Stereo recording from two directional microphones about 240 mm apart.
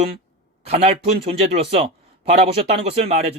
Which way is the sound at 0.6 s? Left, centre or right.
Right.